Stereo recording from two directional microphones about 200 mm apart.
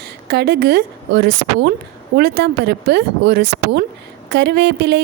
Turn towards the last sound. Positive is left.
turn(degrees=-60)  # may be behind; listen again after turning